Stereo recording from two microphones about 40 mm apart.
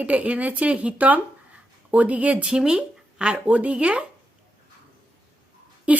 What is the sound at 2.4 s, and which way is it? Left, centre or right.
Speech, centre.